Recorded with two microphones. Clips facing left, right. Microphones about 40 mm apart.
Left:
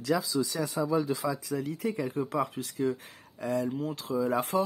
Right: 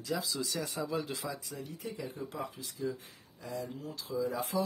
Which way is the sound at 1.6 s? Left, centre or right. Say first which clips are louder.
Left 9 dB; left.